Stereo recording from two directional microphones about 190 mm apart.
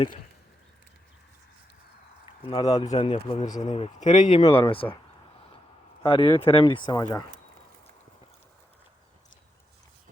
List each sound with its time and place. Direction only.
2.4 s speech: 20° left (ahead or behind)
2.8 s speech: 35° left (ahead or behind)
6.0 s speech: 30° left (ahead or behind)